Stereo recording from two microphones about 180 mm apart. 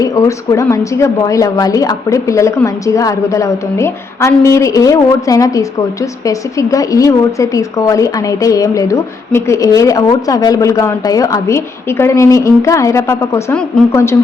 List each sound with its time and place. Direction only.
0.0 s a woman's voice: 20° left (ahead or behind)